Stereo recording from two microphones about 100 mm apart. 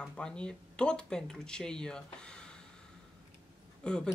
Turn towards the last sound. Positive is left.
turn(degrees=10)  # may be behind; listen again after turning